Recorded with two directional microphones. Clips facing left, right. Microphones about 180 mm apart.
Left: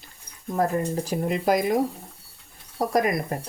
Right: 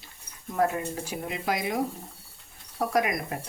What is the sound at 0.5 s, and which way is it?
Speech, 40° left (ahead or behind).